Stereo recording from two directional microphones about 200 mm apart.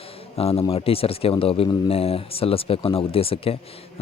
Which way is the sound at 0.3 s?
30° left (ahead or behind).